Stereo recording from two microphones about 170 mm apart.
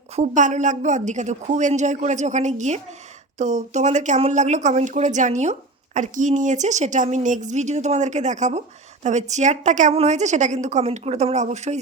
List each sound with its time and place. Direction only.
0.2 s speech: 45° right (ahead or behind)